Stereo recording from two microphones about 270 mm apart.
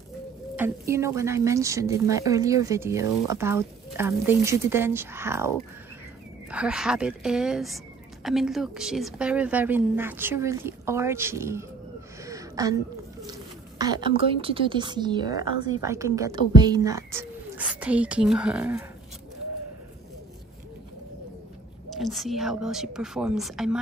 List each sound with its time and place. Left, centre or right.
0.6 s a woman's voice: centre
12.3 s a sound: centre
13.3 s a woman's voice: centre
21.9 s speech: centre